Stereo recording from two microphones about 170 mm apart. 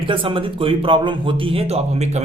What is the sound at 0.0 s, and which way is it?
Speech, 30° right (ahead or behind).